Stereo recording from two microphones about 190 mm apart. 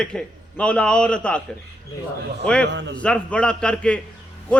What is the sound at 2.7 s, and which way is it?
Speech, 65° right (ahead or behind).